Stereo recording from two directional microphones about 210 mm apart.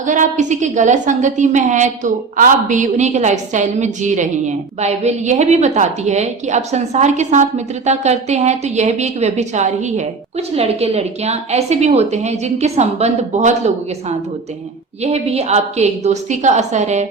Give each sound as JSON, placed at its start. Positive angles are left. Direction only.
{"t": 0.0, "sound": "a woman's voice", "side_deg": -35}
{"t": 15.0, "sound": "a woman's voice", "side_deg": -30}